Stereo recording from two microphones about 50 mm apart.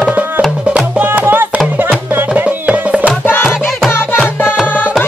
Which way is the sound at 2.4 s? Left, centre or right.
Right.